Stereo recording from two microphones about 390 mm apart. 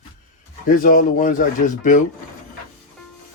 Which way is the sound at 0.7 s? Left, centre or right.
Left.